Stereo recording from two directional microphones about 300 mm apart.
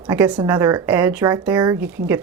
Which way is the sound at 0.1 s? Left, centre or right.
Centre.